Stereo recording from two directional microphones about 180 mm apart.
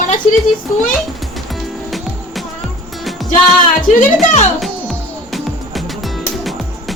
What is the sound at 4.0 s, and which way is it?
Speech, 45° left (ahead or behind).